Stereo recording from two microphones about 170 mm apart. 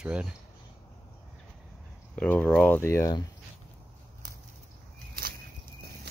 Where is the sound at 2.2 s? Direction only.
10° left (ahead or behind).